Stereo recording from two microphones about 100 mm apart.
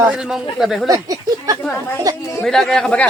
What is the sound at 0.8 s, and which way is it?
Speech, 35° right (ahead or behind).